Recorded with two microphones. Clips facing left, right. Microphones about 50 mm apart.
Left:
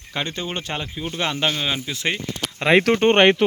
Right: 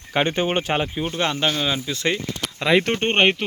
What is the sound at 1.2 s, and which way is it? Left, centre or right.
Speech, centre.